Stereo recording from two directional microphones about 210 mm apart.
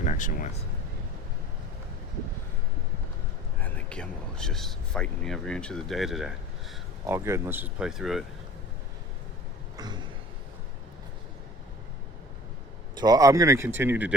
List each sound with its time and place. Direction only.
0.0 s speech: 35° left (ahead or behind)
3.6 s speech: 5° left (ahead or behind)
7.1 s speech: 10° right (ahead or behind)
9.7 s a sound: 20° right (ahead or behind)
13.0 s speech: 15° right (ahead or behind)